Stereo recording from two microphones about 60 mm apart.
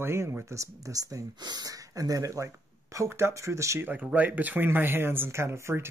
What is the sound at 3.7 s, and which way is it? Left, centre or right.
Speech, right.